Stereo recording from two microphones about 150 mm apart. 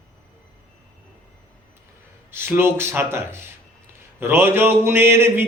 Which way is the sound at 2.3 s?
15° right (ahead or behind).